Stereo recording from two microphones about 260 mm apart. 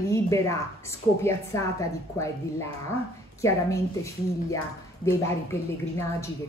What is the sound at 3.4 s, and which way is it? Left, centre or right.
A woman's voice, centre.